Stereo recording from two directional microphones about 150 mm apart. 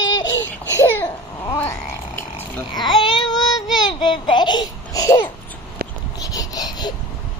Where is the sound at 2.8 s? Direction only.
Centre (ahead or behind).